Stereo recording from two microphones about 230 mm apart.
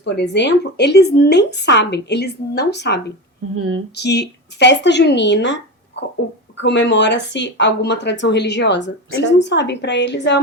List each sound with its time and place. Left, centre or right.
0.0 s speech: left
3.5 s female singing: right
3.9 s speech: left